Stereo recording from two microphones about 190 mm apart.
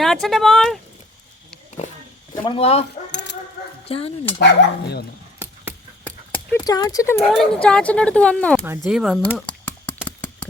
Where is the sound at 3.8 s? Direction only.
30° left (ahead or behind).